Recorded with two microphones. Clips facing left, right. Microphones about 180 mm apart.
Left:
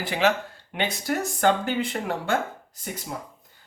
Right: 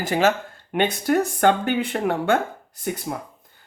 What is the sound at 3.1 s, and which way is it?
Speech, 50° right (ahead or behind).